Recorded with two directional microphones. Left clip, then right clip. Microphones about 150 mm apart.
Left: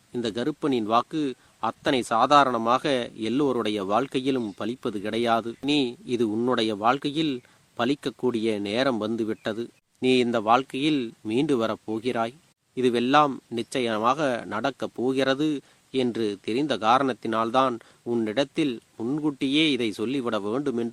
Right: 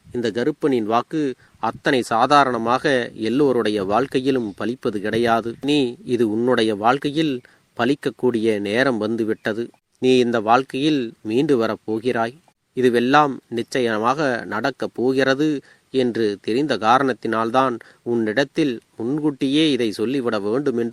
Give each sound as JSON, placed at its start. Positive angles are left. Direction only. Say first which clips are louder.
{"t": 0.1, "sound": "speech", "louder": "right 7 dB", "side_deg": -30}